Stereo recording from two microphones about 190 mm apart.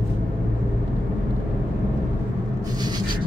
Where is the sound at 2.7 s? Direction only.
20° right (ahead or behind).